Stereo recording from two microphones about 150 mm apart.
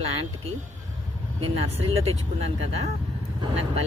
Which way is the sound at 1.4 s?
40° right (ahead or behind).